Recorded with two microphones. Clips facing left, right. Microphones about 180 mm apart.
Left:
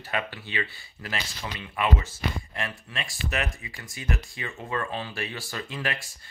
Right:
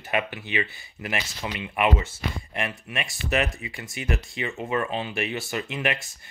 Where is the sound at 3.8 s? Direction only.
20° right (ahead or behind).